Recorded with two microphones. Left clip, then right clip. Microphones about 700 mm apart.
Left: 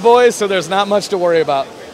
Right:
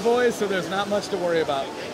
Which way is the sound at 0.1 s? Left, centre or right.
Left.